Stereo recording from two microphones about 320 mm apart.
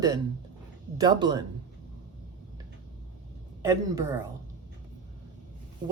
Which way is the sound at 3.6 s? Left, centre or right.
Centre.